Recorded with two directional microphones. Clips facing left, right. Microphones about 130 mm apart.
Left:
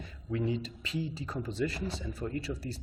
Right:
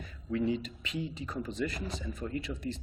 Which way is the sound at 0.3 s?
30° left (ahead or behind).